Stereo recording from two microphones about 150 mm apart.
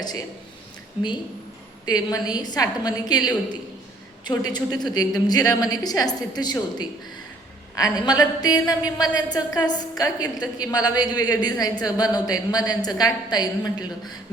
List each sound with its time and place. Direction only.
1.9 s a woman's voice: 25° left (ahead or behind)